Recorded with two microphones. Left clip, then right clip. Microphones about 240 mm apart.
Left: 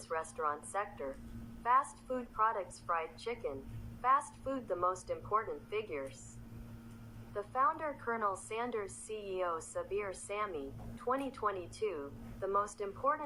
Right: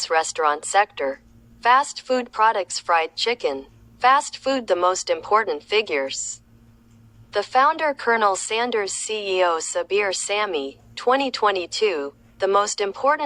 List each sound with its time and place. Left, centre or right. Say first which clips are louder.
0.0 s a woman's voice: right 17 dB; right
7.3 s a woman's voice: right 15 dB; right